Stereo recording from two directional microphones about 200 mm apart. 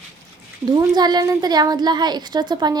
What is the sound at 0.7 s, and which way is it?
A woman's voice, 20° right (ahead or behind).